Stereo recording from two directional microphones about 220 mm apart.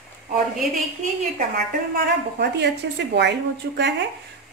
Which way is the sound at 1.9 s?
50° right (ahead or behind).